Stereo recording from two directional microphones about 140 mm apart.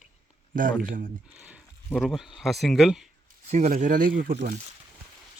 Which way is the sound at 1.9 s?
Centre (ahead or behind).